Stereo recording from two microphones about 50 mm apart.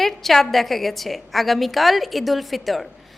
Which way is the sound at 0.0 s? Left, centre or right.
Centre.